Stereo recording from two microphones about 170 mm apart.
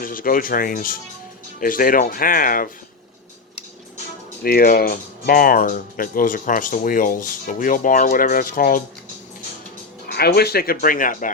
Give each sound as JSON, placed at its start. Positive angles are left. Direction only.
{"t": 0.0, "sound": "speech", "side_deg": 55}
{"t": 4.4, "sound": "speech", "side_deg": 60}
{"t": 10.1, "sound": "speech", "side_deg": 65}